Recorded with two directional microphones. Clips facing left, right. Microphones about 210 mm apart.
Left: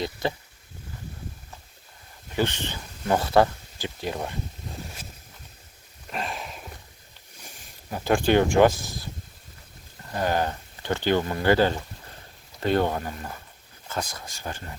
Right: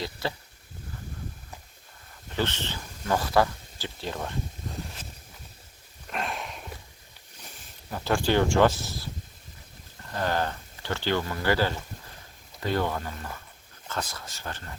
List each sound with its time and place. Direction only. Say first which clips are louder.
0.0 s speech: left 4 dB; 20° left (ahead or behind)
2.3 s speech: left 3 dB; 15° left (ahead or behind)
3.1 s speech: left 4 dB; 25° left (ahead or behind)
6.1 s a sound: even; centre (ahead or behind)
7.9 s speech: left 4 dB; 20° left (ahead or behind)
10.2 s speech: left 3 dB; 15° left (ahead or behind)
12.7 s speech: left 4 dB; 25° left (ahead or behind)
13.8 s speech: left 2 dB; 10° left (ahead or behind)